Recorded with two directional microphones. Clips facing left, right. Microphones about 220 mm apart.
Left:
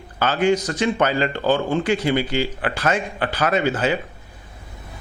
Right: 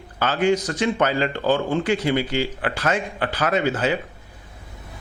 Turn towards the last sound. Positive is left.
turn(degrees=15)  # may be behind; listen again after turning